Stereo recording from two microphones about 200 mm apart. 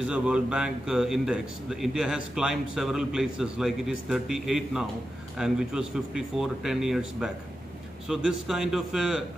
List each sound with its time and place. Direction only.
0.0 s a man's voice: 5° right (ahead or behind)